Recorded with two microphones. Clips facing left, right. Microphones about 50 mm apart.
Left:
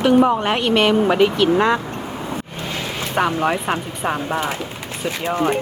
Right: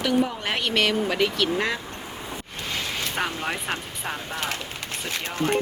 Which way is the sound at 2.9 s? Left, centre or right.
Centre.